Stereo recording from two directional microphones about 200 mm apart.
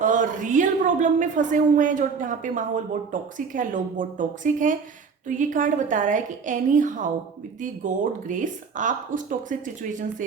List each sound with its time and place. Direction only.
0.0 s a woman's voice: 40° right (ahead or behind)